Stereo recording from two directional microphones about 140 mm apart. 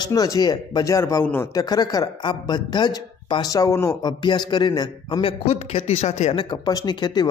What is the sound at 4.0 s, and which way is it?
A man's voice, 30° left (ahead or behind).